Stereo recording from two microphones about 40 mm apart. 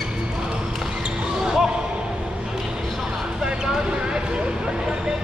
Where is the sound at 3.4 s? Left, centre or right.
Centre.